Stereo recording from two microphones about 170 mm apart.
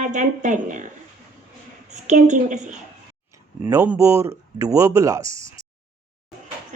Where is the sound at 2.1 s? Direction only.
45° right (ahead or behind).